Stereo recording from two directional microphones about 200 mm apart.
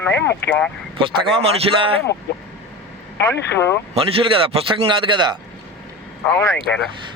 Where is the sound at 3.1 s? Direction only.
10° left (ahead or behind).